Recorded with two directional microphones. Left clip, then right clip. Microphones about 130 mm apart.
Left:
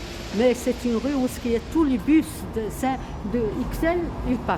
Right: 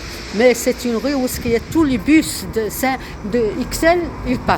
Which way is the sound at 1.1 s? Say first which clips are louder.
Right 6 dB; 20° right (ahead or behind).